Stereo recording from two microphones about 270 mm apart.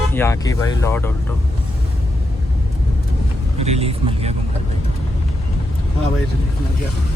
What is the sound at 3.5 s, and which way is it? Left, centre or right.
Speech, right.